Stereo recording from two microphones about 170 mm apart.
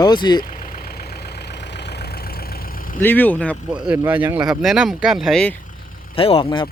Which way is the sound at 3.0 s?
10° left (ahead or behind).